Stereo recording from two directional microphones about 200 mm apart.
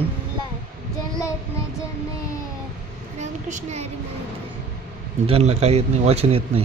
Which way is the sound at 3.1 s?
35° right (ahead or behind).